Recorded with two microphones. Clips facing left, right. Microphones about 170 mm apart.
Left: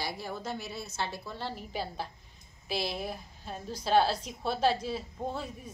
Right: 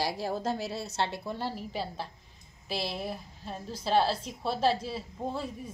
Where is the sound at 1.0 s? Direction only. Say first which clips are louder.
Right 5 dB; 25° right (ahead or behind).